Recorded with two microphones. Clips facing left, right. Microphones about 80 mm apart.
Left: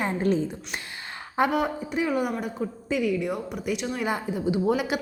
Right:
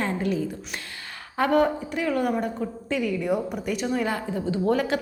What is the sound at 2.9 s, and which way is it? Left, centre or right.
A woman's voice, centre.